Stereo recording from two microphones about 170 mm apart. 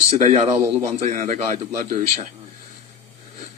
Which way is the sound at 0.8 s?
45° right (ahead or behind).